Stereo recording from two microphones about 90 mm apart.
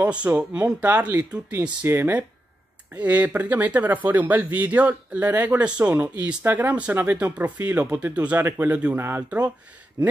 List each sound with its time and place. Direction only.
0.0 s speech: 15° right (ahead or behind)